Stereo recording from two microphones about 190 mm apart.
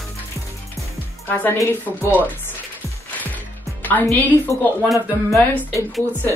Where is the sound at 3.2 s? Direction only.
10° left (ahead or behind).